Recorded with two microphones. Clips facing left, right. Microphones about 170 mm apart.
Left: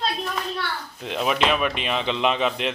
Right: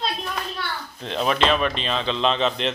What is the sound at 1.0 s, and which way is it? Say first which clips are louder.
Speech: right 1 dB; 10° left (ahead or behind).